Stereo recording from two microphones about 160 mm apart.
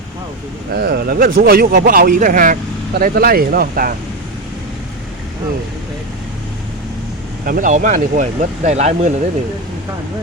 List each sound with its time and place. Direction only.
0.7 s speech: 80° right
7.4 s speech: 60° right (ahead or behind)